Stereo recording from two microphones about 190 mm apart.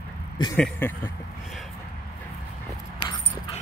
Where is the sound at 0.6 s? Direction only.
10° left (ahead or behind).